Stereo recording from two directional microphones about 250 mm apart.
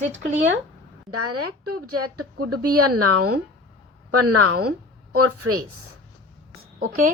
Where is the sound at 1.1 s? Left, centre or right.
Right.